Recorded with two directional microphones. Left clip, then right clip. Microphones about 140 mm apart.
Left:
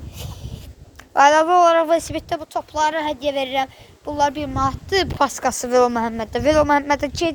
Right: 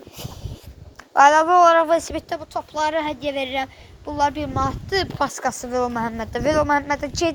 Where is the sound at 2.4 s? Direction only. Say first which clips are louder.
Left 3 dB; 90° left.